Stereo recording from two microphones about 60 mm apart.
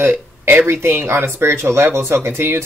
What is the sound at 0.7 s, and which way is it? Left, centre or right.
Speech, right.